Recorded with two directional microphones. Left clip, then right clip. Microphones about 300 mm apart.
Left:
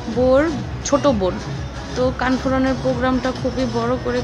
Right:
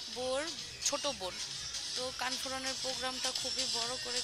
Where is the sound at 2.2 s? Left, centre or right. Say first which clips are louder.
Left 18 dB; right.